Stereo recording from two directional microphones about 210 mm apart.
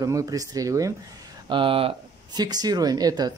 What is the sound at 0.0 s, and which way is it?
Speech, 15° right (ahead or behind).